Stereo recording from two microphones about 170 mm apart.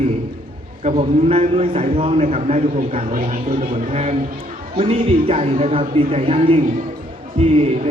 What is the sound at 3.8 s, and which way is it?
A man's voice, 40° right (ahead or behind).